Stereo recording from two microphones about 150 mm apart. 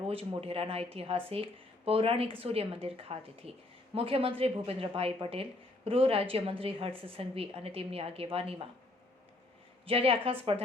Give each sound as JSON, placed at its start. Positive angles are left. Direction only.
{"t": 0.1, "sound": "a woman's voice", "side_deg": -40}
{"t": 9.8, "sound": "a woman's voice", "side_deg": -40}